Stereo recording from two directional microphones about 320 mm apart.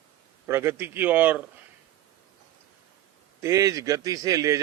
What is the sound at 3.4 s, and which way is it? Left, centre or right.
A man's voice, centre.